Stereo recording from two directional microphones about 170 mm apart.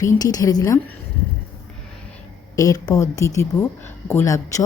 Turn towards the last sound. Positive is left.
turn(degrees=15)  # may be behind; listen again after turning